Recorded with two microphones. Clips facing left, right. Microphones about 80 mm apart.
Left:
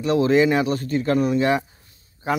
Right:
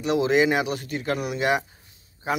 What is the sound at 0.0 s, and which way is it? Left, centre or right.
Speech, centre.